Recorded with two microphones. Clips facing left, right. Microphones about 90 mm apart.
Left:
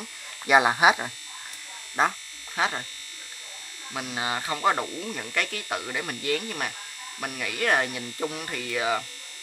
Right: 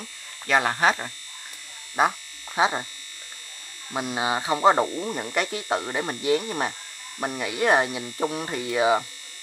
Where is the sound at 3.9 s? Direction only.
25° right (ahead or behind).